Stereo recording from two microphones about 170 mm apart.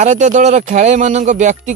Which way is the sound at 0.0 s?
45° right (ahead or behind).